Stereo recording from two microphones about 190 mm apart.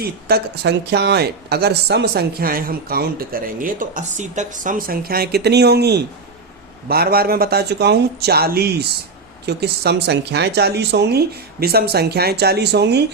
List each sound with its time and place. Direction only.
0.0 s speech: 55° right (ahead or behind)